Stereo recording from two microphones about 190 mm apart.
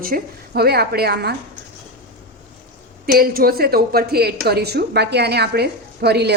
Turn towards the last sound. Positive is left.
turn(degrees=-60)  # may be behind; listen again after turning